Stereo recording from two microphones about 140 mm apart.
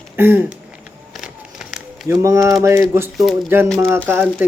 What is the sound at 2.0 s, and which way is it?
Speech, 20° right (ahead or behind).